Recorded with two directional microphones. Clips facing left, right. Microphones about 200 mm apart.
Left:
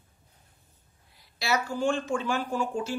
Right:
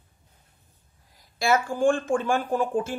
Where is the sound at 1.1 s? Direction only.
45° right (ahead or behind).